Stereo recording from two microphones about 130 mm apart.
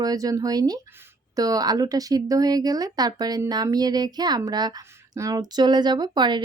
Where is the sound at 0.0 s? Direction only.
30° right (ahead or behind).